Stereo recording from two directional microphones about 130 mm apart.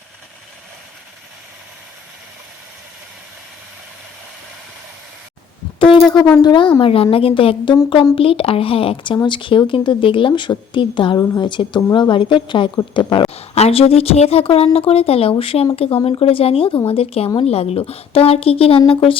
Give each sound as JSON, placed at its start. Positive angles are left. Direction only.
{"t": 5.8, "sound": "a sound", "side_deg": 35}
{"t": 6.4, "sound": "speech", "side_deg": 35}
{"t": 13.3, "sound": "speech", "side_deg": 50}